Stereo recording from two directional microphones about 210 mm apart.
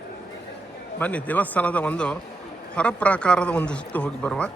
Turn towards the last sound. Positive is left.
turn(degrees=5)  # may be behind; listen again after turning